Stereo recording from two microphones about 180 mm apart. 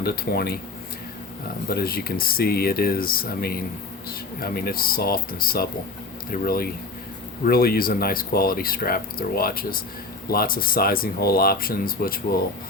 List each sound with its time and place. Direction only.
0.0 s speech: 60° left (ahead or behind)
1.6 s speech: 55° left (ahead or behind)